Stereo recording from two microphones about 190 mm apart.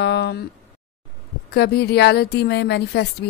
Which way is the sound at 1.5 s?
55° left (ahead or behind).